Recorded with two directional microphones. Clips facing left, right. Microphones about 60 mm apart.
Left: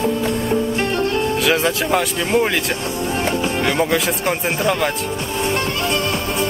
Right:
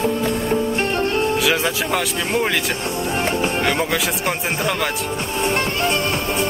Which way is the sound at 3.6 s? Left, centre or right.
Centre.